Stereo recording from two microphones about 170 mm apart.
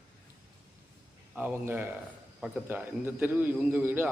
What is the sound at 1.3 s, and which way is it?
A man's voice, 10° right (ahead or behind).